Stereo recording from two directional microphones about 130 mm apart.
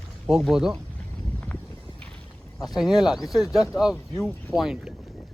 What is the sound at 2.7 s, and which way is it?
Speech, 5° right (ahead or behind).